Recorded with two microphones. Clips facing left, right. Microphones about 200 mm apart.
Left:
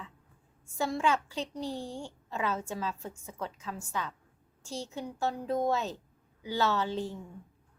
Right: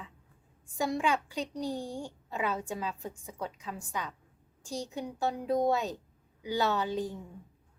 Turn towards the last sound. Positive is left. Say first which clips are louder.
# even
turn(degrees=-15)  # may be behind; listen again after turning